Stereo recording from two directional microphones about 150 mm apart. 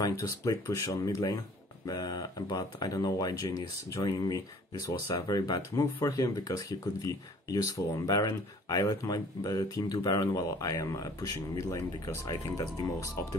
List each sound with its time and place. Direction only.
0.0 s speech: 25° left (ahead or behind)